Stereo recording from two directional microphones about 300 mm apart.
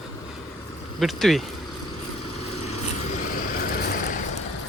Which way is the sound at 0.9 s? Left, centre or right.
Centre.